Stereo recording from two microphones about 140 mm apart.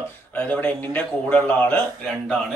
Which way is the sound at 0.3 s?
10° left (ahead or behind).